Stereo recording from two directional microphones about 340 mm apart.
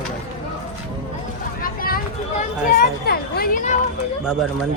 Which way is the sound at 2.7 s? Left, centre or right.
Left.